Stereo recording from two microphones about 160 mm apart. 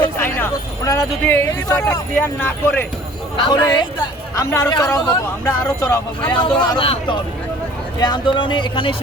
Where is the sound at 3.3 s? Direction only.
25° left (ahead or behind).